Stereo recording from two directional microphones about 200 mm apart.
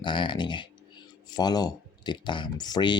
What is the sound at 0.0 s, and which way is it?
Speech, 25° left (ahead or behind).